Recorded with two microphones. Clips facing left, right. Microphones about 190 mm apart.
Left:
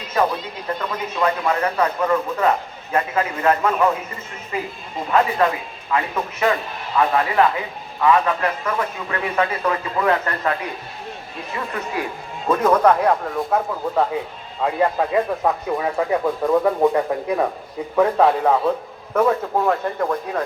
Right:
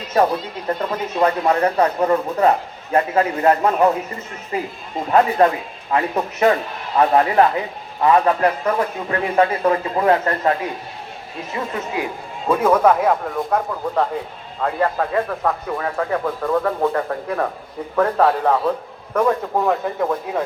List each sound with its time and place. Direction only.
0.8 s speech: 40° right (ahead or behind); by 12.0 s 25° right (ahead or behind)
12.5 s speech: 10° right (ahead or behind)